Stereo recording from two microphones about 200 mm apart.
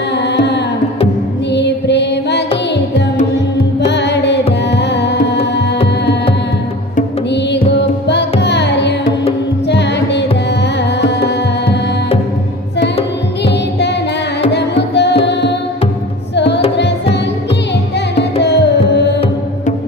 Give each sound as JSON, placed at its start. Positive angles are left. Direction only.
{"t": 1.5, "sound": "music", "side_deg": 60}
{"t": 3.9, "sound": "music", "side_deg": 60}
{"t": 4.7, "sound": "tabla", "side_deg": 60}
{"t": 8.1, "sound": "music", "side_deg": 60}
{"t": 14.5, "sound": "tabla", "side_deg": 60}
{"t": 16.3, "sound": "music", "side_deg": 60}